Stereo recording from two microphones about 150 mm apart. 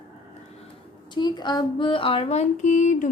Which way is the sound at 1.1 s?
30° left (ahead or behind).